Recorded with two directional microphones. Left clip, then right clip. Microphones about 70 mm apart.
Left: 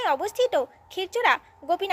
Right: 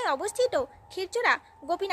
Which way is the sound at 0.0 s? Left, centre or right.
Right.